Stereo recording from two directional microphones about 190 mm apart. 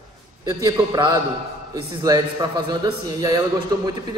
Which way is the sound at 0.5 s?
15° right (ahead or behind).